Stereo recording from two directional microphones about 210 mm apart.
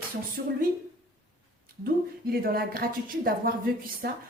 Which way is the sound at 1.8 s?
45° right (ahead or behind).